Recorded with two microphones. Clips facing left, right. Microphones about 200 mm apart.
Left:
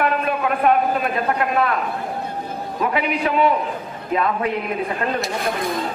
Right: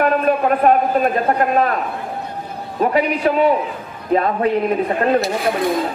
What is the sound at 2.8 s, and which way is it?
A man's voice, 40° right (ahead or behind).